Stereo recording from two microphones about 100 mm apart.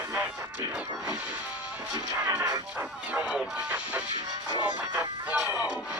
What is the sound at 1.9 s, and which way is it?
Speech, 35° right (ahead or behind).